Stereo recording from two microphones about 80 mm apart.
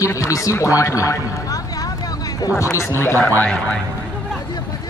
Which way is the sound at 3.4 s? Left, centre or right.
Centre.